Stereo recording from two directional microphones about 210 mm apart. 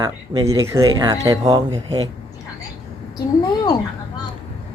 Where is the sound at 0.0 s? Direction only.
15° right (ahead or behind).